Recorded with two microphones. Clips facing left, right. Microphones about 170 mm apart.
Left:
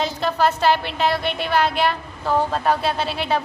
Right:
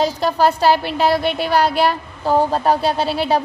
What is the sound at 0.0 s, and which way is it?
A woman's voice, 35° right (ahead or behind).